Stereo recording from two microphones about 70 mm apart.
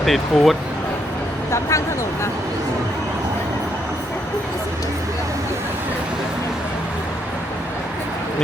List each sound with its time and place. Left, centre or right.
0.0 s speech: centre
1.5 s speech: left